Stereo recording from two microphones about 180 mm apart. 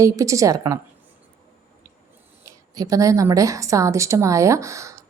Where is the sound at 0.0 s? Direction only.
15° right (ahead or behind).